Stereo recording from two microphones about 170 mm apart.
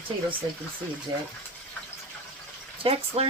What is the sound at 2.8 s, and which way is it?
Speech, 35° right (ahead or behind).